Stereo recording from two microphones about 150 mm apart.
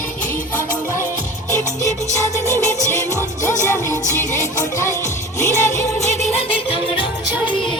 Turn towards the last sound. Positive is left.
turn(degrees=40)  # may be behind; listen again after turning